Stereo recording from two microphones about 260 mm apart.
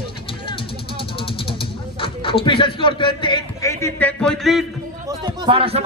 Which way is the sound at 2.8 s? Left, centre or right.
Centre.